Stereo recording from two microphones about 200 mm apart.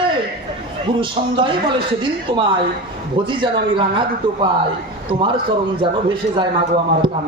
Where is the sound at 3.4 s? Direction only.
25° right (ahead or behind).